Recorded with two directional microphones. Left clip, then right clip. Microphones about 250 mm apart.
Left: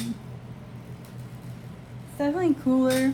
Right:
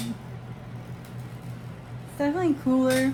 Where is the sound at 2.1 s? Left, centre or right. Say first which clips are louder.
Even; centre.